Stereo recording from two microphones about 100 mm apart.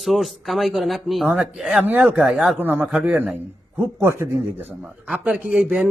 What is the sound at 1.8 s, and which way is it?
Speech, 15° right (ahead or behind).